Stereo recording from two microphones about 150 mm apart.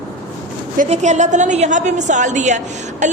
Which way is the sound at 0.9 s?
50° right (ahead or behind).